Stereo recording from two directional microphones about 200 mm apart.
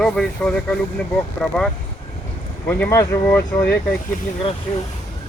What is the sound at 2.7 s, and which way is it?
Speech, 15° left (ahead or behind).